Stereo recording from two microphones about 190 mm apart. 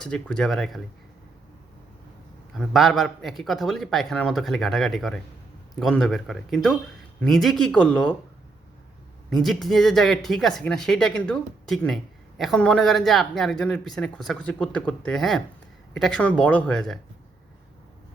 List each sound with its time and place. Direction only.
0.0 s speech: 5° left (ahead or behind)
2.5 s speech: centre (ahead or behind)
9.3 s speech: centre (ahead or behind)